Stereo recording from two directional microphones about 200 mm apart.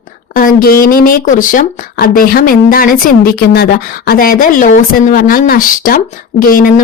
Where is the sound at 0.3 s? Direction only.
45° left (ahead or behind).